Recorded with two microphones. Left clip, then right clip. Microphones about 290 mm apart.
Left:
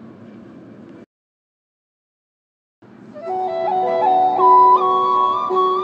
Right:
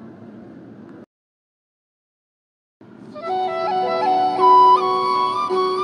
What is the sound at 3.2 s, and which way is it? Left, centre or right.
Music, right.